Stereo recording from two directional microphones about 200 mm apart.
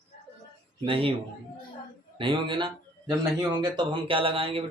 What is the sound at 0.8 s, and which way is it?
Speech, 25° right (ahead or behind).